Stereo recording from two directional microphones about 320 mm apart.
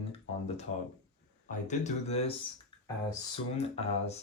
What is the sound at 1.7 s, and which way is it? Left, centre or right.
Speech, left.